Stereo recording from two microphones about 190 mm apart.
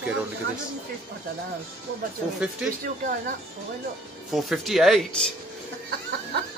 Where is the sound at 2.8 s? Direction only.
45° right (ahead or behind).